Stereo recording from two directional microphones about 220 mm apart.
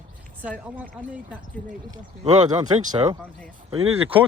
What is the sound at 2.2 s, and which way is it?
Speech, 20° right (ahead or behind).